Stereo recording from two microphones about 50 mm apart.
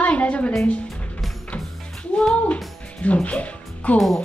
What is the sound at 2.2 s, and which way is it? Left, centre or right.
A woman's voice, left.